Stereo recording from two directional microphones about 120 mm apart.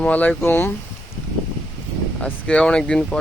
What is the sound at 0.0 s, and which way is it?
Speech, 10° left (ahead or behind).